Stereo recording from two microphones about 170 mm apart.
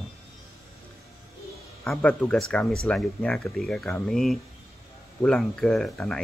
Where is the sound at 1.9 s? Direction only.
Centre (ahead or behind).